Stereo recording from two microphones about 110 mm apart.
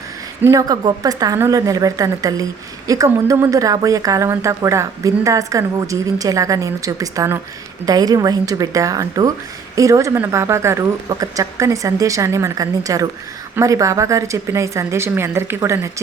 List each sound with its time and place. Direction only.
0.5 s a woman's voice: 35° right (ahead or behind)